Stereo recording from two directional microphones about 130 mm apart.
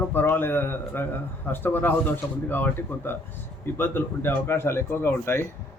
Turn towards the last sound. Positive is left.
turn(degrees=20)  # may be behind; listen again after turning